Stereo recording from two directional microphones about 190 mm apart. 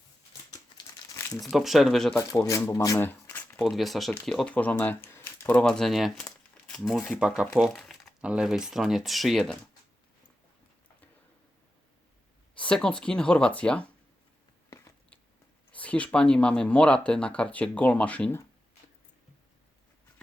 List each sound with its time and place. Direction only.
0.8 s crumpling: 15° left (ahead or behind)
1.5 s speech: centre (ahead or behind)
2.1 s speech: 15° left (ahead or behind)
3.6 s speech: centre (ahead or behind)
12.5 s a sound: 5° left (ahead or behind)
13.0 s speech: 5° left (ahead or behind)
14.7 s biting: 15° left (ahead or behind)
15.7 s speech: 5° left (ahead or behind)